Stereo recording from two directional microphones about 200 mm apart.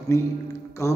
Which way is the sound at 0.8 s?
15° left (ahead or behind).